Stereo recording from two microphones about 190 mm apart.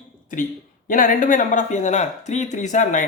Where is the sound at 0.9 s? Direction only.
45° left (ahead or behind).